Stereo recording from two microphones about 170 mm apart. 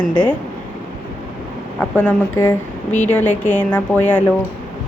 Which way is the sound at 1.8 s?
10° left (ahead or behind).